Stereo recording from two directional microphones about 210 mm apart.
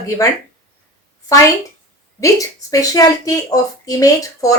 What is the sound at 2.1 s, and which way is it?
A woman's voice, 15° left (ahead or behind).